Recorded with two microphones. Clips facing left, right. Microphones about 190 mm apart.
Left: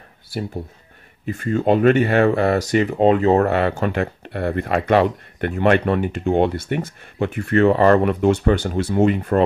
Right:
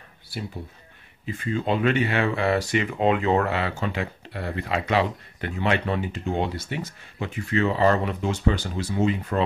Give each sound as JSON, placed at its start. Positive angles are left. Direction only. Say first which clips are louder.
{"t": 1.2, "sound": "speech", "louder": "left 7 dB", "side_deg": 45}